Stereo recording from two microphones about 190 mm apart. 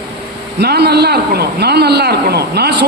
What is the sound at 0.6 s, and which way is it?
A man's voice, 60° right (ahead or behind).